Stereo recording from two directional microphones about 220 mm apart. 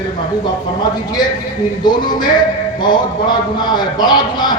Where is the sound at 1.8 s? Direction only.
20° left (ahead or behind).